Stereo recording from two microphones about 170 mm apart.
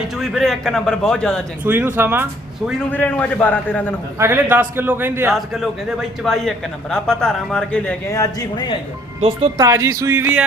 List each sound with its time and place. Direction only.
0.2 s a man's voice: centre (ahead or behind)
1.6 s a man's voice: 10° right (ahead or behind)
2.9 s a man's voice: 10° left (ahead or behind)
4.2 s a man's voice: 10° right (ahead or behind)
5.3 s a man's voice: centre (ahead or behind)
8.1 s speech: 20° left (ahead or behind)
9.6 s speech: 20° right (ahead or behind)